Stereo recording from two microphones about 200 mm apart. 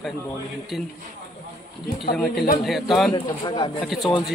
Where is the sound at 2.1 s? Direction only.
Centre (ahead or behind).